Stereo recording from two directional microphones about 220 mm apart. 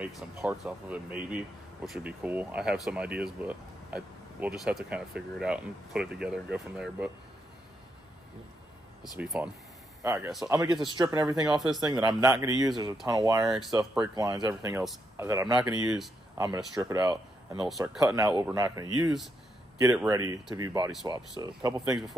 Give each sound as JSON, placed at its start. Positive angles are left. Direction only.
{"t": 0.0, "sound": "speech", "side_deg": -5}
{"t": 9.2, "sound": "speech", "side_deg": -5}
{"t": 11.4, "sound": "speech", "side_deg": 0}
{"t": 11.9, "sound": "a man's voice", "side_deg": -20}
{"t": 13.4, "sound": "speech", "side_deg": 0}
{"t": 13.7, "sound": "speech", "side_deg": -15}
{"t": 14.8, "sound": "speech", "side_deg": 0}
{"t": 16.3, "sound": "speech", "side_deg": -20}
{"t": 17.1, "sound": "speech", "side_deg": 0}
{"t": 18.1, "sound": "speech", "side_deg": -10}